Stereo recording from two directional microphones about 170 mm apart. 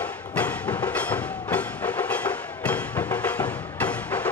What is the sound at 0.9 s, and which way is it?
Wood block, 10° left (ahead or behind).